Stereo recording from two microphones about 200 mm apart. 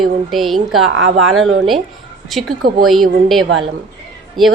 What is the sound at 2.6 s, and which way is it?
Speech, 50° right (ahead or behind).